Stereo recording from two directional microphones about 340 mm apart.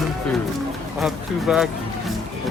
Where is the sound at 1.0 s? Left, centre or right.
Centre.